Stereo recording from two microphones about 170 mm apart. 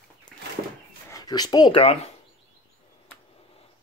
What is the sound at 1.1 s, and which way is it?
Speech, 25° left (ahead or behind).